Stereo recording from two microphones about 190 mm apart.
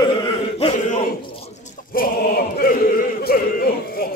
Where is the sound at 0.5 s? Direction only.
35° left (ahead or behind).